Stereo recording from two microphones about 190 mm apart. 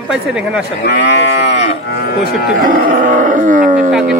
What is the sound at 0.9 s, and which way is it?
Livestock, 65° left (ahead or behind).